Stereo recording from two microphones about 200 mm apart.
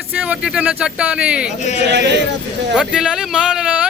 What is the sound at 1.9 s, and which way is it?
Speech, 55° right (ahead or behind).